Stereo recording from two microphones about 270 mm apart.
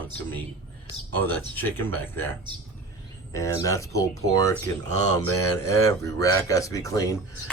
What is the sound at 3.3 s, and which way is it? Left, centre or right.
Speech, centre.